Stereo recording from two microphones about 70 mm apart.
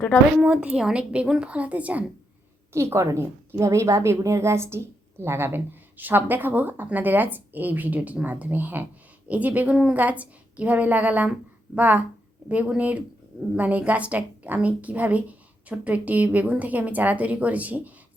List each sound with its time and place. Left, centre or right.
0.6 s a woman's voice: centre
2.7 s a woman's voice: right